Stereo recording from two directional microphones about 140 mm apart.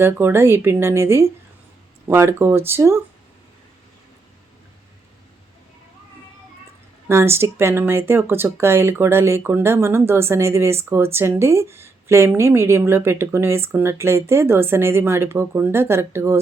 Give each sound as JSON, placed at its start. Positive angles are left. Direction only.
{"t": 0.0, "sound": "speech", "side_deg": -15}
{"t": 7.1, "sound": "speech", "side_deg": -20}